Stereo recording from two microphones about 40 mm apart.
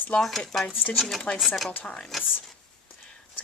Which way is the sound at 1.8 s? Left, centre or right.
Left.